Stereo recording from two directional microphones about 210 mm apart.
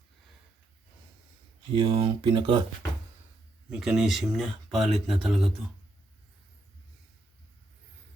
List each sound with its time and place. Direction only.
1.7 s speech: 25° right (ahead or behind)
3.7 s speech: centre (ahead or behind)